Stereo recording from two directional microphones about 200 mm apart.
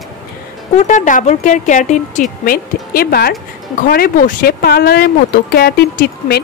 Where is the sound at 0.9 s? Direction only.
40° left (ahead or behind).